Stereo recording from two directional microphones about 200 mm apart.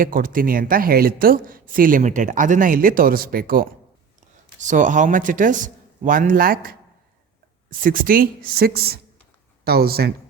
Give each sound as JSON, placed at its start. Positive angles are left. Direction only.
{"t": 0.0, "sound": "speech", "side_deg": -45}